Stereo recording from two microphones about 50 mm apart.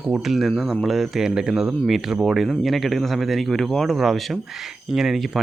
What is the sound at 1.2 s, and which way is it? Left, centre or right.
Speech, centre.